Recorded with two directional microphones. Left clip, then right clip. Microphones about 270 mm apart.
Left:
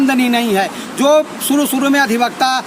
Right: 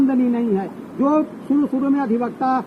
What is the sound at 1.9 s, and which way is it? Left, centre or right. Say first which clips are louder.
Speech: left 8 dB; left.